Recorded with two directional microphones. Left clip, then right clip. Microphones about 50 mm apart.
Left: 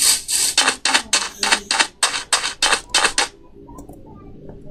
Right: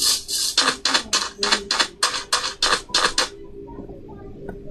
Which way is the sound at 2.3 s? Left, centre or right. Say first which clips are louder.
Left 3 dB; left.